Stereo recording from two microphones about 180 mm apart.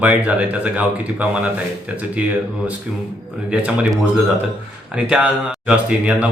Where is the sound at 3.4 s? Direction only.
5° right (ahead or behind).